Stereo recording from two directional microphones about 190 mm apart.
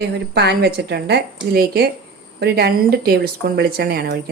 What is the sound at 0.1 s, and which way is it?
A woman's voice, 60° right (ahead or behind).